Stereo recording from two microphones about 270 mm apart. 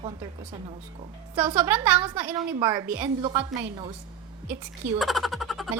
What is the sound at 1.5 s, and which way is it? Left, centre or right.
A woman's voice, centre.